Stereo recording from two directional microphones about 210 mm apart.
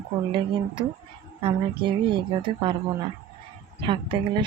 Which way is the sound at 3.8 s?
25° right (ahead or behind).